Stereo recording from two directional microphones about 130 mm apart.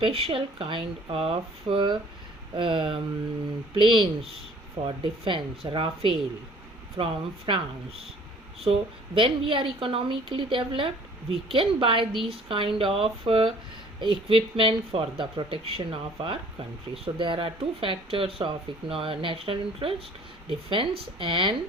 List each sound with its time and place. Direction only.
0.0 s speech: 50° right (ahead or behind)